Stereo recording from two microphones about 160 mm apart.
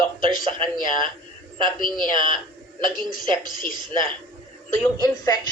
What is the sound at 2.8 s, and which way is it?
A woman's voice, 60° left (ahead or behind).